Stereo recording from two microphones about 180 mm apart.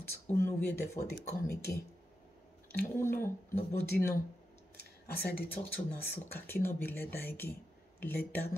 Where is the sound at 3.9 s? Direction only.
60° left (ahead or behind).